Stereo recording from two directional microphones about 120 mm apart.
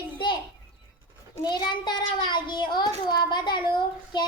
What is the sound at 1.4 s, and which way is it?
A child's voice, 35° left (ahead or behind).